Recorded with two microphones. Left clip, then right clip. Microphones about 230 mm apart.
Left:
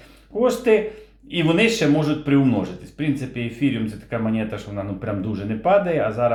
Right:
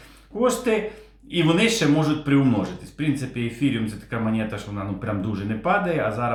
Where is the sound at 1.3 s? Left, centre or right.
Centre.